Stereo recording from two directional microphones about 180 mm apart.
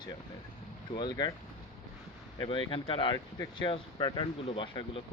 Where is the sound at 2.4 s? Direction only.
25° left (ahead or behind).